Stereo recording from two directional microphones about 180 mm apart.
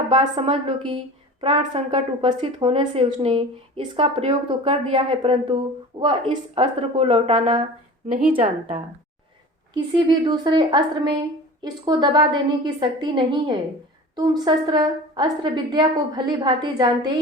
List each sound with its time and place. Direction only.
0.1 s a woman's voice: 30° right (ahead or behind)
9.7 s a woman's voice: 25° right (ahead or behind)